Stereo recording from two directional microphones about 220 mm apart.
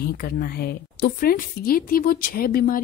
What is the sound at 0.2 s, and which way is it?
A woman's voice, 45° left (ahead or behind).